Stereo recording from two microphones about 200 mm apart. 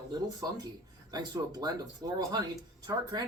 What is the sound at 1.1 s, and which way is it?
Speech, 20° right (ahead or behind).